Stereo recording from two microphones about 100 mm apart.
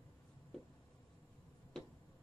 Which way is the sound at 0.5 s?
5° left (ahead or behind).